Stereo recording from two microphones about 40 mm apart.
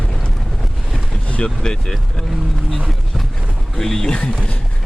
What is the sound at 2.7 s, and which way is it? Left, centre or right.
Speech, centre.